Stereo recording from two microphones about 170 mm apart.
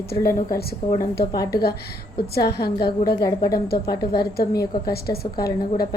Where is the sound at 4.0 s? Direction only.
70° left (ahead or behind).